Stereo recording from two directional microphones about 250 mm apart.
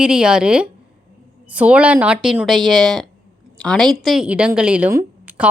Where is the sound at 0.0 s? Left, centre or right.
Centre.